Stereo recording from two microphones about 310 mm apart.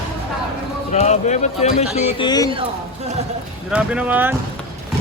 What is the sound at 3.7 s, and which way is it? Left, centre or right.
Speech, centre.